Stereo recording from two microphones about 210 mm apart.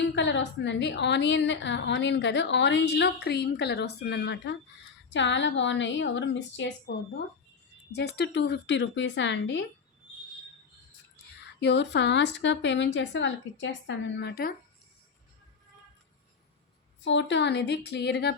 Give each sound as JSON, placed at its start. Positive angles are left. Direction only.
{"t": 0.0, "sound": "a woman's voice", "side_deg": 60}
{"t": 7.9, "sound": "a woman's voice", "side_deg": 50}
{"t": 11.6, "sound": "a woman's voice", "side_deg": 55}
{"t": 17.0, "sound": "a woman's voice", "side_deg": 60}